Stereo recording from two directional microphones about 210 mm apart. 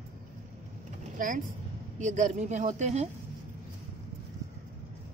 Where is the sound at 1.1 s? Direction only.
40° right (ahead or behind).